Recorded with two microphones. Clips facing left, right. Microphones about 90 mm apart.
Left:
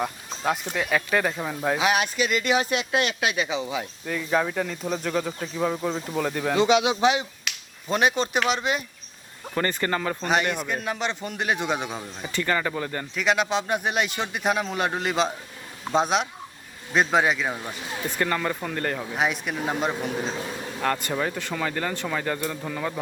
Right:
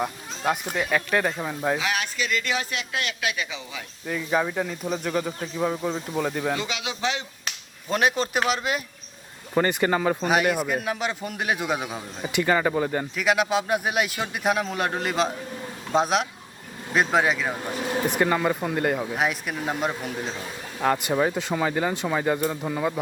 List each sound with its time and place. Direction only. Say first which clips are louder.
0.0 s speech: right 1 dB; centre (ahead or behind)
1.8 s speech: left 5 dB; 20° left (ahead or behind)
4.0 s speech: right 1 dB; 5° right (ahead or behind)
6.6 s speech: left 10 dB; 25° left (ahead or behind)
7.5 s finger snapping: even; 40° right (ahead or behind)
7.9 s speech: even; centre (ahead or behind)
9.6 s speech: right 4 dB; 15° right (ahead or behind)
12.2 s speech: right 4 dB; 15° right (ahead or behind)
13.1 s speech: even; 5° right (ahead or behind)
18.2 s speech: right 1 dB; 15° right (ahead or behind)
20.8 s speech: right 4 dB; 10° right (ahead or behind)